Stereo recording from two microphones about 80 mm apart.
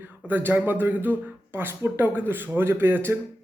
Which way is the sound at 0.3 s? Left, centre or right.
Right.